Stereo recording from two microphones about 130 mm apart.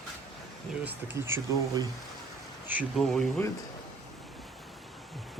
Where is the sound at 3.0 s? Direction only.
5° left (ahead or behind).